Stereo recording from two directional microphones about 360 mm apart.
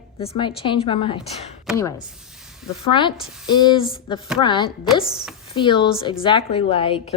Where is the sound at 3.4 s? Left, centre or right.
Centre.